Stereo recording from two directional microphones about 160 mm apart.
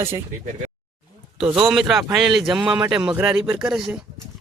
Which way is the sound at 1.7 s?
Centre (ahead or behind).